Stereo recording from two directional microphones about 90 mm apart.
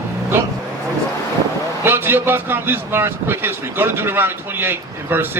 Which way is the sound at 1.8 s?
25° right (ahead or behind).